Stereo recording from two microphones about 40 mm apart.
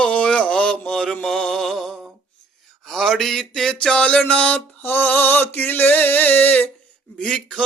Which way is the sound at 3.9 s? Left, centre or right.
Left.